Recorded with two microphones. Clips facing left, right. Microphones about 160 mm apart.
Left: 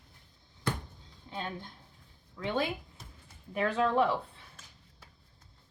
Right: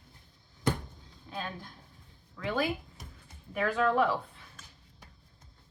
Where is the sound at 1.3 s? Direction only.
25° left (ahead or behind).